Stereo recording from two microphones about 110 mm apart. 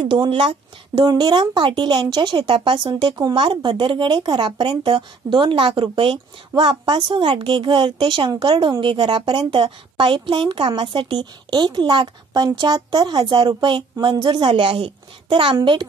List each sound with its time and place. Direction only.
0.0 s speech: 50° right (ahead or behind)